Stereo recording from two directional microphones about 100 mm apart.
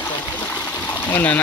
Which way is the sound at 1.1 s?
20° left (ahead or behind).